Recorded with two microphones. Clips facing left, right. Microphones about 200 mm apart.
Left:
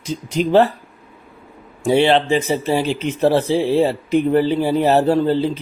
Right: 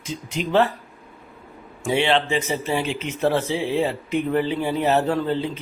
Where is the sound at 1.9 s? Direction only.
35° left (ahead or behind).